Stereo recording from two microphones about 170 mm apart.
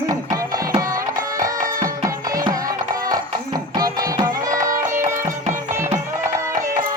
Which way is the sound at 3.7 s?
25° right (ahead or behind).